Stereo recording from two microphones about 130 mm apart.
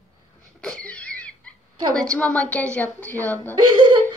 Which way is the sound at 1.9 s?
10° left (ahead or behind).